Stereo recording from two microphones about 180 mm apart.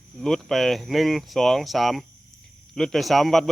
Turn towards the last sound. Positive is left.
turn(degrees=0)  # may be behind; listen again after turning